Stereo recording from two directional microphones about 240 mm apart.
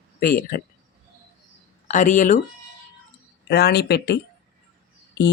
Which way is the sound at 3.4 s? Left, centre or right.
Left.